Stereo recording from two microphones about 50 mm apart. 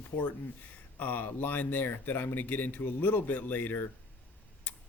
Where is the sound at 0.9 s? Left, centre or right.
Left.